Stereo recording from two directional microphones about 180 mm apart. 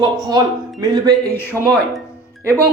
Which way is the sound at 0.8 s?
20° right (ahead or behind).